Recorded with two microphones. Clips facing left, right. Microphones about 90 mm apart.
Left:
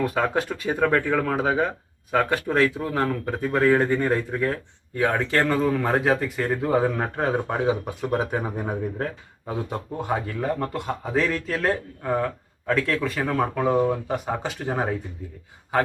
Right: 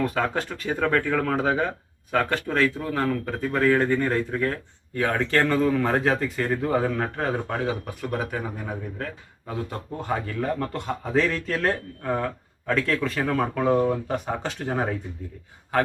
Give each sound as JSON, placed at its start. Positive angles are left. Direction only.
{"t": 0.0, "sound": "speech", "side_deg": 5}
{"t": 9.5, "sound": "a man's voice", "side_deg": 15}